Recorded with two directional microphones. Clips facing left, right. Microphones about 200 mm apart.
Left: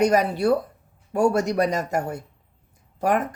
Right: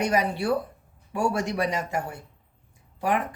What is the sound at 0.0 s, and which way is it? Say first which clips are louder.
A woman's voice: left 5 dB; 40° left (ahead or behind).